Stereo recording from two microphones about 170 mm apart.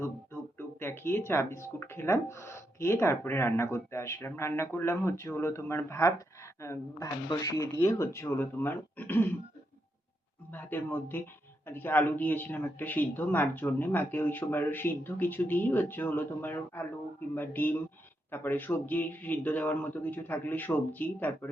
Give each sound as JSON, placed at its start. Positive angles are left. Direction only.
{"t": 0.8, "sound": "speech", "side_deg": 15}
{"t": 10.5, "sound": "speech", "side_deg": 10}